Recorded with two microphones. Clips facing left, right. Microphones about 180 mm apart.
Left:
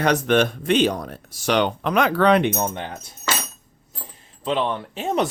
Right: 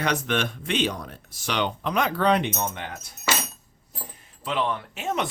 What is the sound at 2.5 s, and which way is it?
Speech, 40° left (ahead or behind).